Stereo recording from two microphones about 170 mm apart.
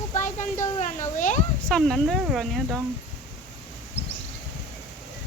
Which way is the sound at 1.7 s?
Centre (ahead or behind).